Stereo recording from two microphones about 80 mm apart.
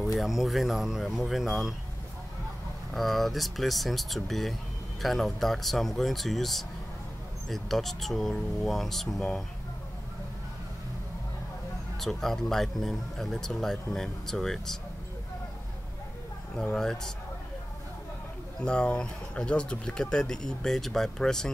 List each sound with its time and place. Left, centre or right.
0.2 s speech: centre
2.9 s speech: centre
12.0 s speech: centre
16.5 s speech: centre
18.6 s speech: centre